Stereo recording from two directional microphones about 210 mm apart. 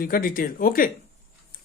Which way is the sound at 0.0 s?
45° left (ahead or behind).